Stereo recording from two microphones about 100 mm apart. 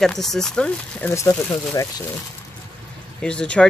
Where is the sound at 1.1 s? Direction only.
25° left (ahead or behind).